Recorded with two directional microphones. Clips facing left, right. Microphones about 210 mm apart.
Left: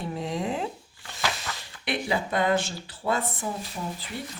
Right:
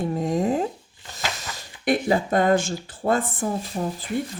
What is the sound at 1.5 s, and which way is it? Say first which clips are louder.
Speech: right 8 dB; 45° right (ahead or behind).